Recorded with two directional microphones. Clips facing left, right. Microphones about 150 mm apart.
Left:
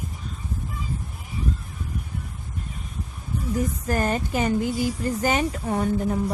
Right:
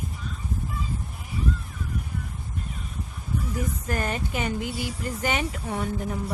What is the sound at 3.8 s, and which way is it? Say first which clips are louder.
Speech: left 5 dB; 40° left (ahead or behind).